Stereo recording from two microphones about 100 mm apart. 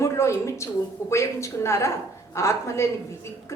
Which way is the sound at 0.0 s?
30° left (ahead or behind).